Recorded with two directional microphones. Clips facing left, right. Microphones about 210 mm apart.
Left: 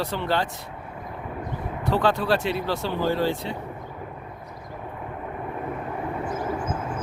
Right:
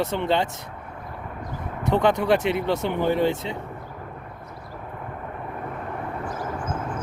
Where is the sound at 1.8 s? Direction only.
20° right (ahead or behind).